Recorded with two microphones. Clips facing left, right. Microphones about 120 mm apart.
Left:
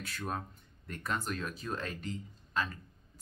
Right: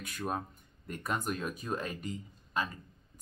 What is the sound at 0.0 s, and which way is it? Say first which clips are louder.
Speech: right 2 dB; 10° right (ahead or behind).